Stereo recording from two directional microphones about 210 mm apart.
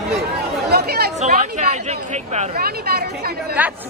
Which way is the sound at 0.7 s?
50° right (ahead or behind).